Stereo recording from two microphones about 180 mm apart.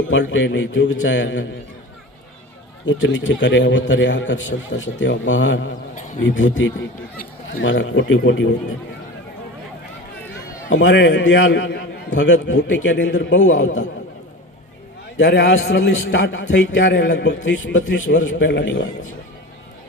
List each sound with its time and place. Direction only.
0.1 s a man's voice: 90° left
2.8 s a man's voice: 90° left
10.7 s a man's voice: 90° left
15.2 s a man's voice: 70° left (ahead or behind)